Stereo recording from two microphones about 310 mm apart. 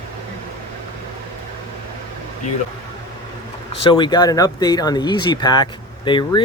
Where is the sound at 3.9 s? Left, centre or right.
Centre.